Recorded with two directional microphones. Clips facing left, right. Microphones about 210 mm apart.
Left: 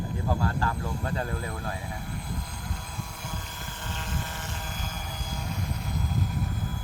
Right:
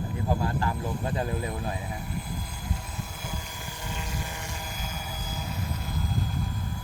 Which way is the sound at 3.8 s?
10° right (ahead or behind).